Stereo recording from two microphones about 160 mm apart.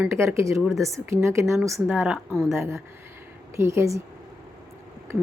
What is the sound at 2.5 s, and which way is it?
Speech, 15° right (ahead or behind).